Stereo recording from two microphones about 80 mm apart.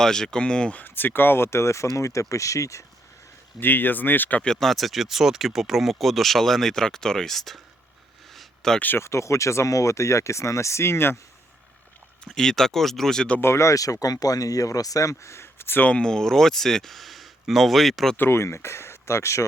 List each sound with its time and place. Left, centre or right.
0.0 s speech: centre; by 2.8 s left
3.6 s speech: left
4.4 s speech: centre
8.3 s a sound: centre
8.8 s speech: left
9.0 s speech: left
12.2 s speech: centre
13.4 s speech: left; by 18.2 s centre
18.2 s speech: left